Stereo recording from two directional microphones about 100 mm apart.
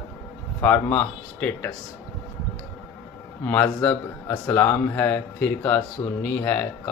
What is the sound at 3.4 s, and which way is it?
A man's voice, 15° left (ahead or behind).